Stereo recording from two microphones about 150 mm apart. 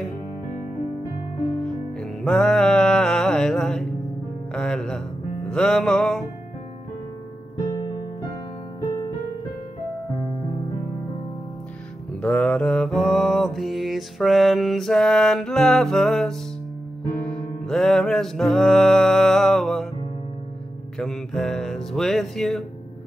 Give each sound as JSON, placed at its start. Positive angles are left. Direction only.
{"t": 2.0, "sound": "music", "side_deg": 5}
{"t": 7.6, "sound": "music", "side_deg": 20}
{"t": 12.2, "sound": "mantra", "side_deg": 5}
{"t": 17.2, "sound": "music", "side_deg": 5}
{"t": 21.0, "sound": "music", "side_deg": 5}